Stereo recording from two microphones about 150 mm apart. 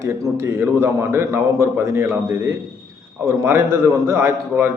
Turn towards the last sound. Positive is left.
turn(degrees=-15)  # may be behind; listen again after turning